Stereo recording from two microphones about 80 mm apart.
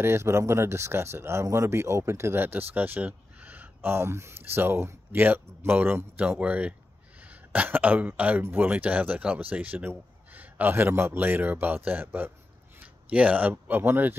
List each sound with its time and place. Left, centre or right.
0.0 s speech: right